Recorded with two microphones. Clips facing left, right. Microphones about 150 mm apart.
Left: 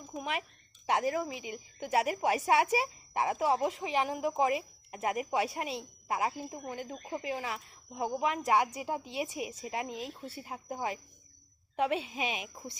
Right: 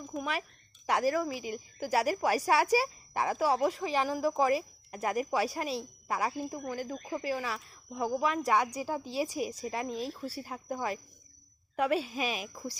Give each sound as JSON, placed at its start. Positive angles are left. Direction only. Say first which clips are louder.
{"t": 0.2, "sound": "a woman's voice", "louder": "right 1 dB", "side_deg": 25}